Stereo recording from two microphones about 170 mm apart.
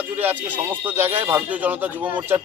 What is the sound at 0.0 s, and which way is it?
Speech, 10° right (ahead or behind).